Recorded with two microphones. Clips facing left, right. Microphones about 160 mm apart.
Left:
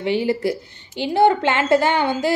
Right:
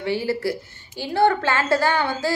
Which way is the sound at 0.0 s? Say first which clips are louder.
Left 3 dB; 20° left (ahead or behind).